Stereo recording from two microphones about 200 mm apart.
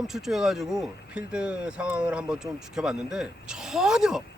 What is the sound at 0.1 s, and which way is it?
Speech, centre (ahead or behind).